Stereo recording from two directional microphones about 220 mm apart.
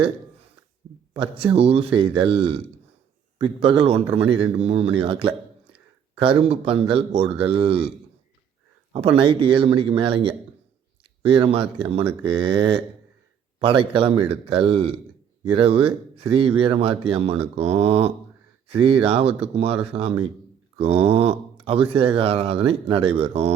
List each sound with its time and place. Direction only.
1.1 s a man's voice: 25° right (ahead or behind)
8.9 s a man's voice: 25° right (ahead or behind)